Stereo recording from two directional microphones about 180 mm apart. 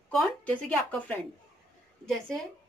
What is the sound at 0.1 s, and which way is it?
Speech, 5° left (ahead or behind).